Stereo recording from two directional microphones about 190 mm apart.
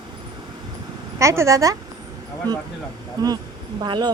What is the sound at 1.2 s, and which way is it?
Speech, 15° right (ahead or behind).